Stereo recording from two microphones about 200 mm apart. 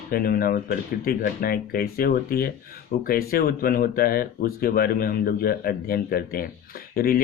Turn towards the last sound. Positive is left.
turn(degrees=50)  # may be behind; listen again after turning